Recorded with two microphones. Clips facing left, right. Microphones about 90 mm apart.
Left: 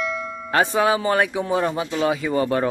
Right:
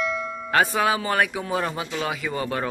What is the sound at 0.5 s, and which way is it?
Speech, 25° left (ahead or behind).